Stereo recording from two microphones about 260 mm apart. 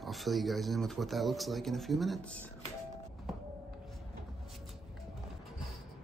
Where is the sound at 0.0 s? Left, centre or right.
Centre.